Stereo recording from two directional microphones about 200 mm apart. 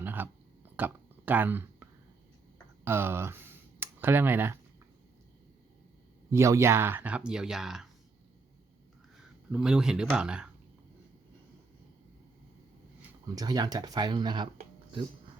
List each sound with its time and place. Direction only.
0.0 s a sound: 10° right (ahead or behind)
2.8 s speech: 10° right (ahead or behind)
6.3 s speech: 15° right (ahead or behind)
9.5 s speech: 5° right (ahead or behind)
13.0 s speech: 20° right (ahead or behind)